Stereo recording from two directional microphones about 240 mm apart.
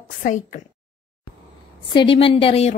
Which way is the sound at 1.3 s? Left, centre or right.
Left.